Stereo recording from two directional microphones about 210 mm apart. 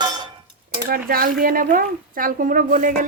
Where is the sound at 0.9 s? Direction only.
45° right (ahead or behind).